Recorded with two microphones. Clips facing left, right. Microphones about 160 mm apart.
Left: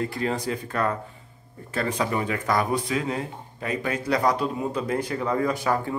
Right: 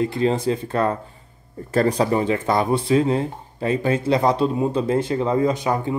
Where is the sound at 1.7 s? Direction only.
40° right (ahead or behind).